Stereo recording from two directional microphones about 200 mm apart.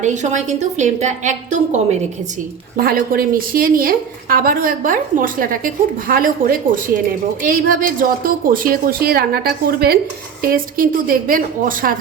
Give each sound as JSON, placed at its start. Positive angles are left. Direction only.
{"t": 0.0, "sound": "a woman's voice", "side_deg": -35}
{"t": 2.7, "sound": "speech", "side_deg": -45}